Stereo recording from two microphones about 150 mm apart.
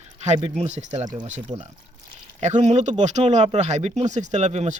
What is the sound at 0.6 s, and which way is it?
Speech, 45° right (ahead or behind).